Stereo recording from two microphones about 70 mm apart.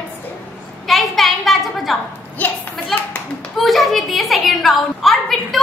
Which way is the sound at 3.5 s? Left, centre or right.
Centre.